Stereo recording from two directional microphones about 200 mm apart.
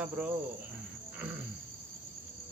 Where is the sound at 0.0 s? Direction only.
5° right (ahead or behind).